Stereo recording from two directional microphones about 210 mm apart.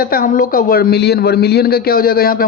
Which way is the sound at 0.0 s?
45° left (ahead or behind).